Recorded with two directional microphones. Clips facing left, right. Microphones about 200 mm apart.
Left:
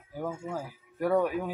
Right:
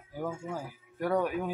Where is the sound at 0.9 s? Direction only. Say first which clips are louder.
Left 3 dB; centre (ahead or behind).